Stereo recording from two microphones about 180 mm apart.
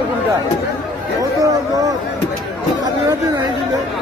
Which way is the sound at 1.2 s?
20° right (ahead or behind).